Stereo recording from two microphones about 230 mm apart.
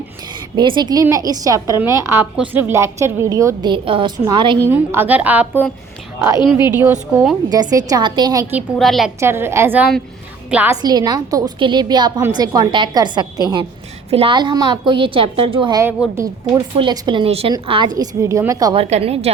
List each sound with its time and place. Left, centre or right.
0.3 s a woman's voice: centre
4.7 s a woman's voice: centre
6.3 s a woman's voice: centre
6.7 s a woman's voice: centre
8.8 s a woman's voice: centre
9.2 s a woman's voice: centre; by 19.3 s right